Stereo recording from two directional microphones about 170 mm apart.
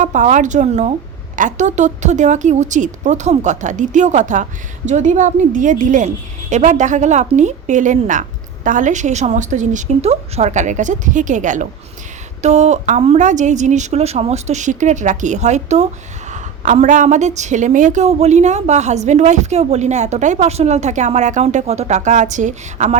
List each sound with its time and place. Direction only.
0.0 s a woman's voice: 45° right (ahead or behind)